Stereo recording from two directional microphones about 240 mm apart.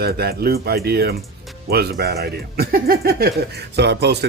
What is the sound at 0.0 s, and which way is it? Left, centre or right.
Speech, right.